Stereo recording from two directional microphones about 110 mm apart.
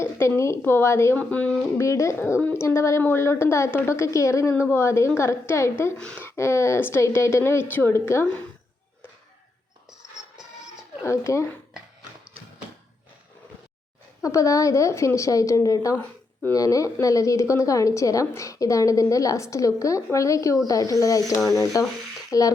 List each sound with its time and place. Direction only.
0.0 s a woman's voice: 25° left (ahead or behind)
1.2 s speech: 15° left (ahead or behind)
1.8 s a woman's voice: 30° left (ahead or behind)
6.0 s speech: 10° left (ahead or behind)
6.2 s a woman's voice: 25° left (ahead or behind)
11.0 s a woman's voice: 25° left (ahead or behind)
14.2 s a woman's voice: 30° left (ahead or behind)